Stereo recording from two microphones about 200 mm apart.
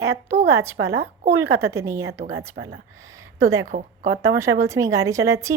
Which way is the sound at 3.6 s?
40° right (ahead or behind).